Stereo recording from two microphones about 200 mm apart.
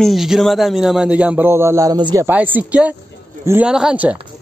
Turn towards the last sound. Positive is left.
turn(degrees=-5)  # may be behind; listen again after turning